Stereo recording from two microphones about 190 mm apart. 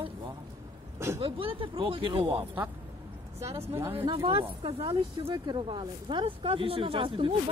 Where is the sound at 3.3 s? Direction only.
15° right (ahead or behind).